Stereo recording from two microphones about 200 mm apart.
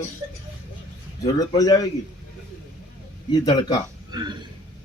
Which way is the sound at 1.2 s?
20° left (ahead or behind).